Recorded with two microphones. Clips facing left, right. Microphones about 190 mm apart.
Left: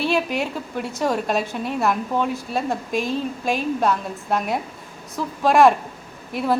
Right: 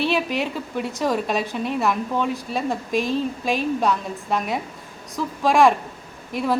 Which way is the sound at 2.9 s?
55° left (ahead or behind).